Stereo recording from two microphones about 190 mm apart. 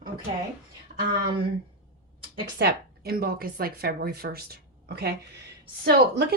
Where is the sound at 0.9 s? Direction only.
45° right (ahead or behind).